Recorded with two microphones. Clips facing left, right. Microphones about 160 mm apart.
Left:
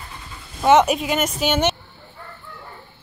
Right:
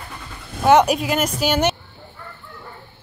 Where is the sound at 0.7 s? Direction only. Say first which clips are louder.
Right 1 dB; centre (ahead or behind).